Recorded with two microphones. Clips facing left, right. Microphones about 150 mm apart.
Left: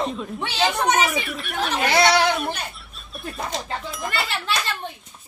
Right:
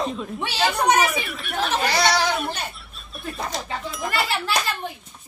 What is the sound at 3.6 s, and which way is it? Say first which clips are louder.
Speech: even; centre (ahead or behind).